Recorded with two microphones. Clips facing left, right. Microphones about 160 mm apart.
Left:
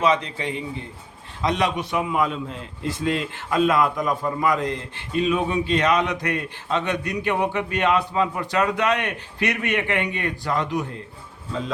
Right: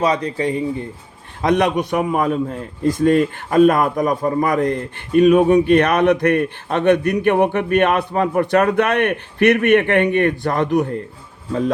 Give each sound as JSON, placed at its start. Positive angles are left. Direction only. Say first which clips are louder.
{"t": 0.0, "sound": "a man's voice", "louder": "right 3 dB", "side_deg": -40}